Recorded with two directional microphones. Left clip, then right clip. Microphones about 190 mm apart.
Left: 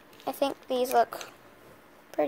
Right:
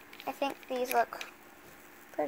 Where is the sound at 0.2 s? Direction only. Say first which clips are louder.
Left 5 dB; 55° left (ahead or behind).